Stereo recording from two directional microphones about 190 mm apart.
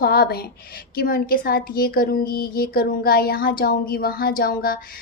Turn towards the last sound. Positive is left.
turn(degrees=50)  # may be behind; listen again after turning